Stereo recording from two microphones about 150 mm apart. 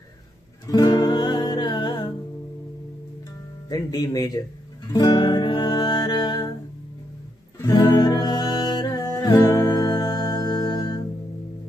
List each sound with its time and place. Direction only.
0.7 s music: 25° left (ahead or behind)
3.6 s speech: 25° left (ahead or behind)
4.9 s music: 30° left (ahead or behind)
7.6 s music: 25° left (ahead or behind)